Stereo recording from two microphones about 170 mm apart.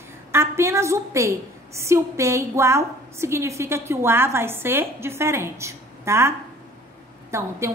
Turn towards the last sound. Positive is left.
turn(degrees=-15)  # may be behind; listen again after turning